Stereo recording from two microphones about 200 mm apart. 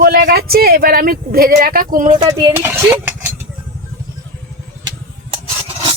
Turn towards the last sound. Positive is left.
turn(degrees=-30)  # may be behind; listen again after turning